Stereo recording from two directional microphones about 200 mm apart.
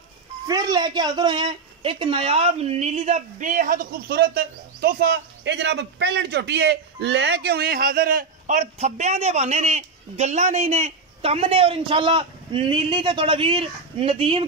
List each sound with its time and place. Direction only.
0.5 s speech: 20° right (ahead or behind)